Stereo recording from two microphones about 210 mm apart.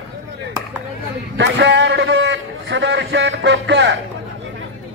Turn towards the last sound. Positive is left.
turn(degrees=-55)  # may be behind; listen again after turning